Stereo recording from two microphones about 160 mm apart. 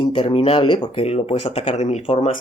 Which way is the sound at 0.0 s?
30° left (ahead or behind).